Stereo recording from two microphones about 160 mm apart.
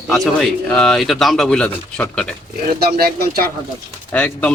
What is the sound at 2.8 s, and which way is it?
Speech, 70° right (ahead or behind).